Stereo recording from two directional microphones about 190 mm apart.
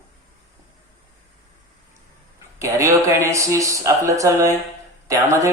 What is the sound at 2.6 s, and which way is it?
Speech, 15° right (ahead or behind).